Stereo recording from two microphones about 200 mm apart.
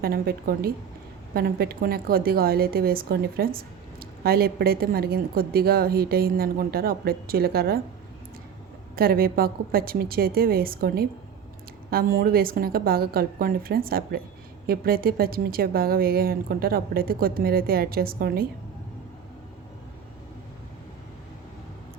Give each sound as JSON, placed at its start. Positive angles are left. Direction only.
{"t": 0.0, "sound": "a woman's voice", "side_deg": -50}
{"t": 9.0, "sound": "a woman's voice", "side_deg": -50}